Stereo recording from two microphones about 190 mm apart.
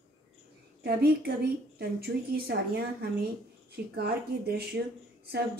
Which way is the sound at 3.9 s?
55° right (ahead or behind).